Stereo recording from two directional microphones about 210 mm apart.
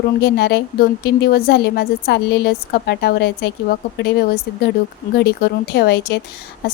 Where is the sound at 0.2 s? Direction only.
55° left (ahead or behind).